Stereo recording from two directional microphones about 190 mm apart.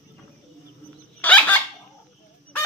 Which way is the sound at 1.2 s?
10° left (ahead or behind).